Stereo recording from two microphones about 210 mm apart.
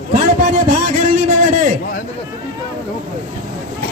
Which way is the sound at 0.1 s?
40° right (ahead or behind).